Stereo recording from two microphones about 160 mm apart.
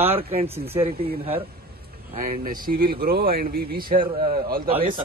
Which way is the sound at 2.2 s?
50° right (ahead or behind).